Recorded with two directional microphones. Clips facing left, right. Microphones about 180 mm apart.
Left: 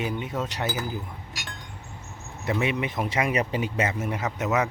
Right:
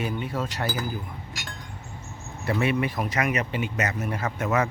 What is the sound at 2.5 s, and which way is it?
Speech, 20° left (ahead or behind).